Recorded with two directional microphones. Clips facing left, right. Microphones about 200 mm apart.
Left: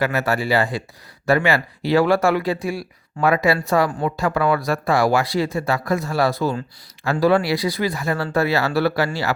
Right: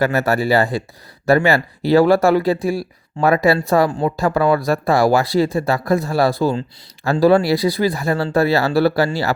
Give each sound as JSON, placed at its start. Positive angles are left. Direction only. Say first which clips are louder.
{"t": 0.0, "sound": "speech", "louder": "right 4 dB", "side_deg": -40}